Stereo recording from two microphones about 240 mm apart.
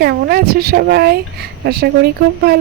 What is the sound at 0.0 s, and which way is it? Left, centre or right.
Speech, right.